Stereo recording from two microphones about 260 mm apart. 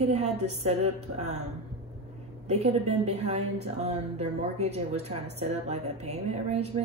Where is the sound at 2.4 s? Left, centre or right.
Right.